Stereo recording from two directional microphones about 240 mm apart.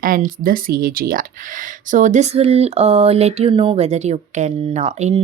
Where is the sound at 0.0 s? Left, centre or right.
Right.